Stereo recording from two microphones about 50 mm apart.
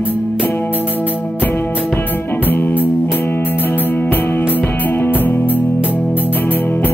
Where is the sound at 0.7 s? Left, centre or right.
Right.